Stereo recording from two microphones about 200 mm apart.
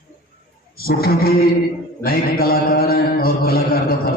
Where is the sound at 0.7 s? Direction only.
50° left (ahead or behind).